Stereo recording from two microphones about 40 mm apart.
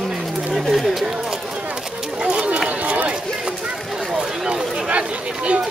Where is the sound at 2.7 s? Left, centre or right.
Right.